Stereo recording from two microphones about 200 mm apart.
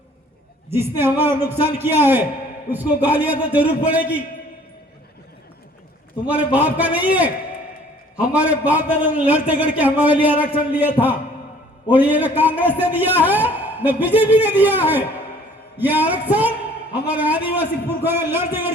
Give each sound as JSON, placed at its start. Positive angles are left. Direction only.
{"t": 0.7, "sound": "a man's voice", "side_deg": -10}
{"t": 6.5, "sound": "a man's voice", "side_deg": -10}
{"t": 8.3, "sound": "a man's voice", "side_deg": -5}